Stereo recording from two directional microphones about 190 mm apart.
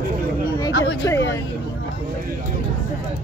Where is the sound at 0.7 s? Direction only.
65° left (ahead or behind).